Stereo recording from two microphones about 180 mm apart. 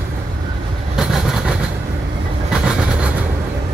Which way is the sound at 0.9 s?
5° right (ahead or behind).